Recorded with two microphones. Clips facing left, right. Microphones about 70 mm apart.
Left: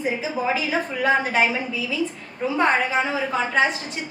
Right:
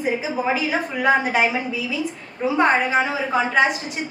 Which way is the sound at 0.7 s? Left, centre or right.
Centre.